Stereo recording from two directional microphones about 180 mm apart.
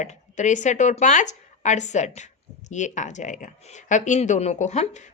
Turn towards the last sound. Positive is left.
turn(degrees=40)  # may be behind; listen again after turning